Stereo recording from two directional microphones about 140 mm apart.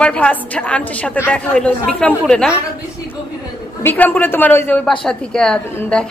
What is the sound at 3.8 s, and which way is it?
A woman's voice, 15° left (ahead or behind).